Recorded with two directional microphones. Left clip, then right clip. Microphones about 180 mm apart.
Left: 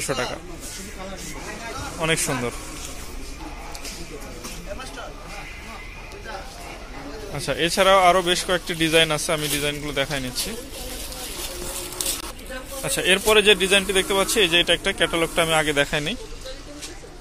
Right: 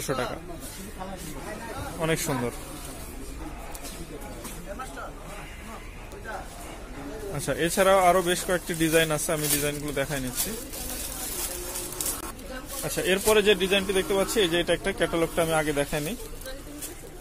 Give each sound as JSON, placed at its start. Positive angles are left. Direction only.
{"t": 0.0, "sound": "speech", "side_deg": -10}
{"t": 2.0, "sound": "speech", "side_deg": -15}
{"t": 7.3, "sound": "speech", "side_deg": -20}
{"t": 12.8, "sound": "speech", "side_deg": -10}